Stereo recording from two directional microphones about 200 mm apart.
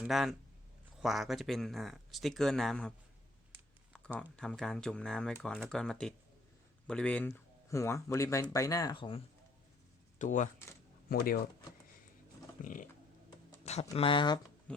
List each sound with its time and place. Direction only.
0.0 s speech: centre (ahead or behind)
4.2 s speech: 5° left (ahead or behind); by 9.2 s 25° left (ahead or behind)
10.2 s speech: 40° left (ahead or behind)
12.6 s speech: 40° left (ahead or behind)
13.9 s speech: 25° left (ahead or behind)
14.7 s pig: 5° left (ahead or behind)